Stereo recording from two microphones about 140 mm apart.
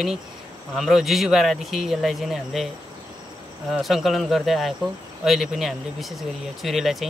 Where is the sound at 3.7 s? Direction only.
Centre (ahead or behind).